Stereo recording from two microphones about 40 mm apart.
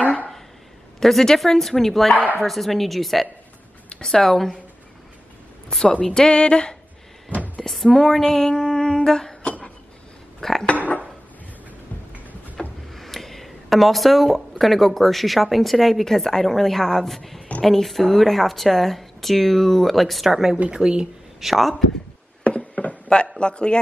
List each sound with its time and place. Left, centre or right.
0.9 s speech: centre
4.0 s speech: centre
5.7 s speech: centre
6.0 s a sound: centre
7.3 s a sound: left
7.6 s speech: centre
9.4 s a sound: left
10.4 s speech: centre
12.5 s speech: centre
20.7 s speech: right
21.4 s speech: centre
22.4 s a sound: left